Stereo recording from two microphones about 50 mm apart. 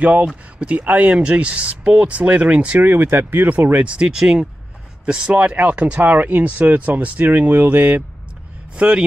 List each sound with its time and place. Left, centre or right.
0.0 s speech: right
2.8 s speech: right
3.8 s speech: right
8.7 s speech: centre